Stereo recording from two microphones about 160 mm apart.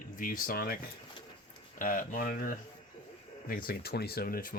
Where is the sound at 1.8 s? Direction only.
55° left (ahead or behind).